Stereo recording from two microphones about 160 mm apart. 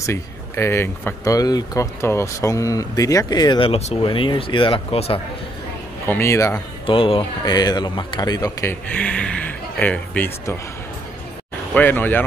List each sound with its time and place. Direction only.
0.0 s speech: 15° left (ahead or behind); by 5.2 s 35° left (ahead or behind)
6.0 s a man's voice: 15° left (ahead or behind)
6.9 s speech: 35° left (ahead or behind)
8.9 s a man's voice: 5° left (ahead or behind)
11.7 s a man's voice: 10° left (ahead or behind)